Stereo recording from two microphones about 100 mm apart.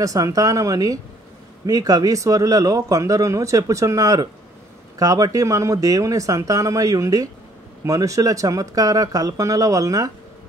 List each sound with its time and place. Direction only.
0.0 s speech: 35° right (ahead or behind)